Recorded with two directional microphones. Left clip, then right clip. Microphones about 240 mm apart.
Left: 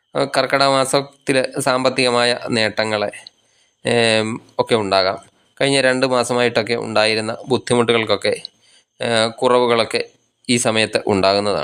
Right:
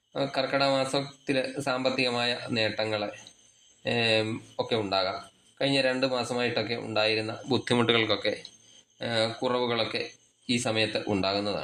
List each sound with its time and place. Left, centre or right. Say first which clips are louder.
0.1 s speech: left 11 dB; left